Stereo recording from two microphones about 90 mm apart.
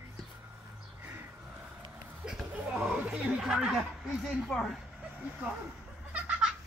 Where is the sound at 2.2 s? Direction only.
5° right (ahead or behind).